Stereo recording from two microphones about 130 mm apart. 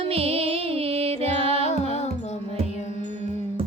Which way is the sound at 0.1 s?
50° right (ahead or behind).